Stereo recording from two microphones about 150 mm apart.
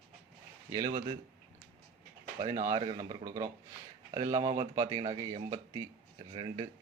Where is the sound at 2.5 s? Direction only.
25° right (ahead or behind).